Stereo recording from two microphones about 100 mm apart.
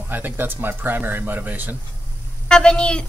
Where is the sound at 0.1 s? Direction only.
20° right (ahead or behind).